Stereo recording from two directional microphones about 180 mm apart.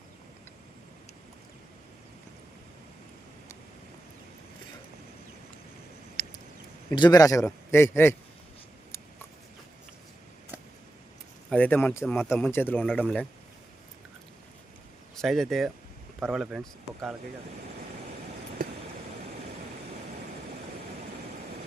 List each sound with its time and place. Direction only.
6.2 s a sound: 30° left (ahead or behind)
6.9 s speech: 25° left (ahead or behind)
11.4 s speech: 10° left (ahead or behind)
15.1 s speech: centre (ahead or behind)